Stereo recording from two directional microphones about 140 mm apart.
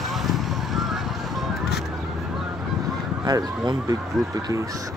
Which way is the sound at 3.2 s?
25° right (ahead or behind).